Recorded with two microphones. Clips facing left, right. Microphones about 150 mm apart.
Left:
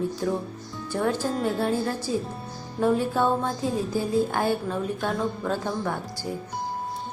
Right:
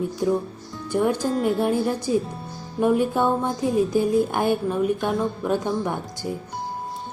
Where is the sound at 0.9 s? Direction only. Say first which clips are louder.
Right 4 dB; 15° right (ahead or behind).